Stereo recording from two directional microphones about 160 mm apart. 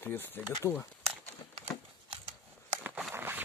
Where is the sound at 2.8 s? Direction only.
10° right (ahead or behind).